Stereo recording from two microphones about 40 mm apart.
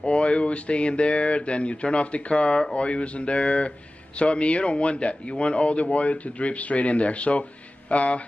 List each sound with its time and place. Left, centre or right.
0.0 s speech: left